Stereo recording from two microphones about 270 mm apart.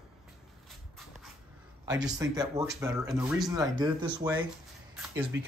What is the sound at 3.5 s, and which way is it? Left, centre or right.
Speech, centre.